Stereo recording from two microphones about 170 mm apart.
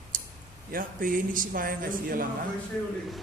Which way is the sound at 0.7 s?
55° right (ahead or behind).